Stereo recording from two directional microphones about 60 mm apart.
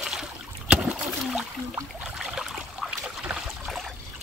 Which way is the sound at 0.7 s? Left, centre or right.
Centre.